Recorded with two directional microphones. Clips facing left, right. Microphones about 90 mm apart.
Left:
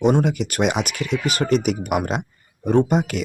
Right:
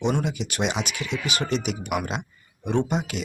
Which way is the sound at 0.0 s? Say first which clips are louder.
Left 7 dB; 50° left (ahead or behind).